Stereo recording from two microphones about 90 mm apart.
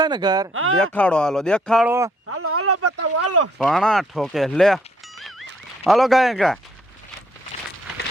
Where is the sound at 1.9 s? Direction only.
30° right (ahead or behind).